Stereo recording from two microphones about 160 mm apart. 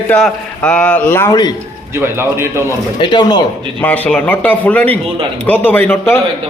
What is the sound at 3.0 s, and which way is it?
Speech, 30° left (ahead or behind).